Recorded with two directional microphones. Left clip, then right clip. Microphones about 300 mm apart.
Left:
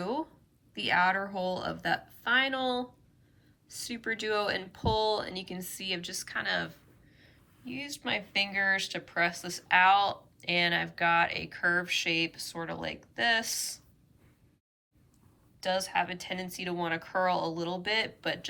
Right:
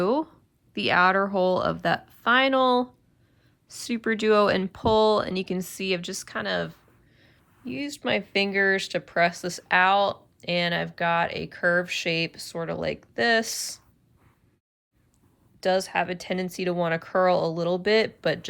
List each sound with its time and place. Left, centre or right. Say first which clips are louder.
0.0 s a sound: right 10 dB; centre
0.7 s speech: right 6 dB; centre
15.6 s speech: right 6 dB; centre